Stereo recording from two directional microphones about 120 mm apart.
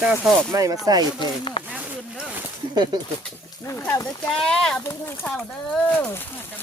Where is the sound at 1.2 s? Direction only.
45° left (ahead or behind).